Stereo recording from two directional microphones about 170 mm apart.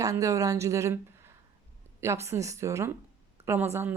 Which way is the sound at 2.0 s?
15° right (ahead or behind).